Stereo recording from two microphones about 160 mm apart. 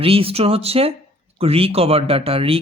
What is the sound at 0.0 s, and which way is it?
Speech, 35° right (ahead or behind).